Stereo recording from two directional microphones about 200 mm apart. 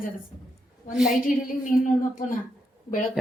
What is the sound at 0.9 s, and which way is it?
Speech, centre (ahead or behind).